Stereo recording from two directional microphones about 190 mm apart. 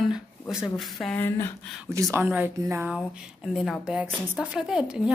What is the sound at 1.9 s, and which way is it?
A woman's voice, 15° right (ahead or behind).